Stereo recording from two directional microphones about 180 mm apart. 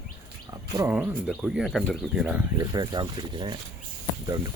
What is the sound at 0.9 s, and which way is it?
Speech, 5° right (ahead or behind).